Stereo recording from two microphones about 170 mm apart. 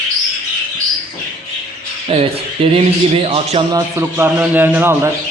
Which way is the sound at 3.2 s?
35° right (ahead or behind).